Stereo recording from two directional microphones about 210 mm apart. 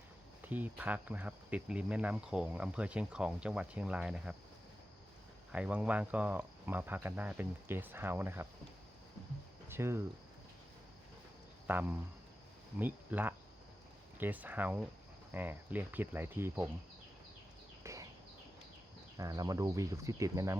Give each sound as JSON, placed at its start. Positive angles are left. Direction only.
{"t": 0.4, "sound": "speech", "side_deg": -10}
{"t": 5.5, "sound": "speech", "side_deg": -5}
{"t": 9.6, "sound": "speech", "side_deg": -10}
{"t": 11.7, "sound": "speech", "side_deg": -10}
{"t": 17.8, "sound": "a sound", "side_deg": -15}
{"t": 19.1, "sound": "speech", "side_deg": -15}